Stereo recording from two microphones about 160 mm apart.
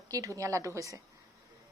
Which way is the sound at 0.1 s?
20° right (ahead or behind).